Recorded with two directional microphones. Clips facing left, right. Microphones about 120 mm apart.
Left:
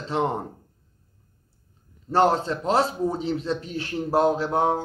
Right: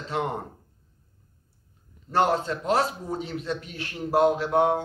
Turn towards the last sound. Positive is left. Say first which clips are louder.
# even
turn(degrees=35)  # may be behind; listen again after turning